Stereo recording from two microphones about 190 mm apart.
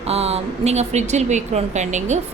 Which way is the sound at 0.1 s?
35° right (ahead or behind).